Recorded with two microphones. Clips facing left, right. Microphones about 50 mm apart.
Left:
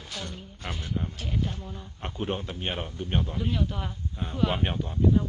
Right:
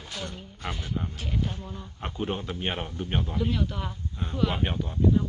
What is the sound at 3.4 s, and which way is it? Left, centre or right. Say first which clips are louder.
A woman's voice: right 1 dB; centre.